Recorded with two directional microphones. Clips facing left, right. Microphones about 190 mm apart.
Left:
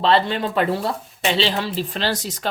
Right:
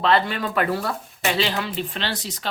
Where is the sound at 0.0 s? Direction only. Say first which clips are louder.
Left 2 dB; 30° left (ahead or behind).